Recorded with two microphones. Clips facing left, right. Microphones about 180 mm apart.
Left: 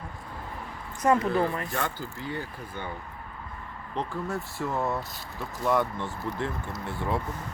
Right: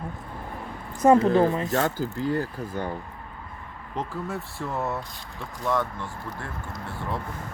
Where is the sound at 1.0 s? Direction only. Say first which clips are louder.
Right 6 dB; 25° right (ahead or behind).